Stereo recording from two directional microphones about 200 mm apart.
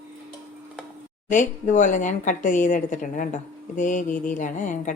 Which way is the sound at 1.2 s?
40° left (ahead or behind).